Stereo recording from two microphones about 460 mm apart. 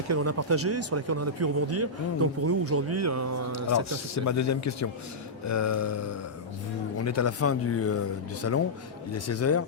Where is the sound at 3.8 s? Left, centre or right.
Left.